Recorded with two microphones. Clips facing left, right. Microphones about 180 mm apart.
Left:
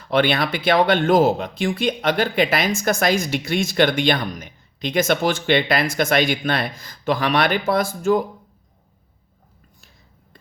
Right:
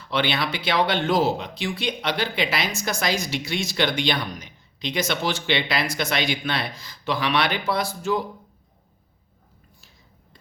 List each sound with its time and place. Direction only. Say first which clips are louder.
0.0 s speech: left 6 dB; 50° left (ahead or behind)